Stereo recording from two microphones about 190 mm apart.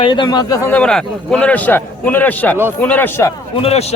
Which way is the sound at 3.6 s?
35° left (ahead or behind).